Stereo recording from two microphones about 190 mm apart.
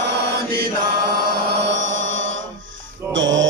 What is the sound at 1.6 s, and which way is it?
Mantra, 70° right (ahead or behind).